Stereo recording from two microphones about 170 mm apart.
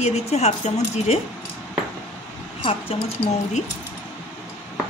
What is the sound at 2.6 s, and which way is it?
Speech, 35° left (ahead or behind).